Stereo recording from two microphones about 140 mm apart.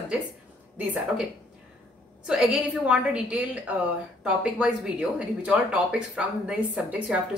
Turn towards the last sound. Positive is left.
turn(degrees=-10)  # may be behind; listen again after turning